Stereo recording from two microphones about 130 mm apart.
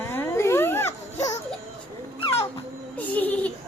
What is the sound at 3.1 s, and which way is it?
Speech, 10° left (ahead or behind).